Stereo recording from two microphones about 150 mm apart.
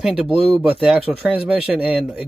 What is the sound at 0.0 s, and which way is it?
Speech, centre (ahead or behind).